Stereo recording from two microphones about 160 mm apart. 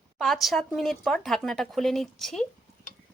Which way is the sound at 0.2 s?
Centre (ahead or behind).